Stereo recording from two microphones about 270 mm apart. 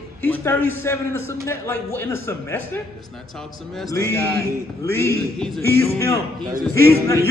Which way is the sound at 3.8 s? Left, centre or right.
Centre.